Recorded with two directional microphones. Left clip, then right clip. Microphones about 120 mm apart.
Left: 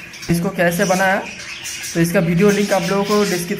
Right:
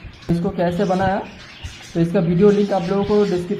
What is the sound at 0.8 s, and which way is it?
Speech, 20° left (ahead or behind).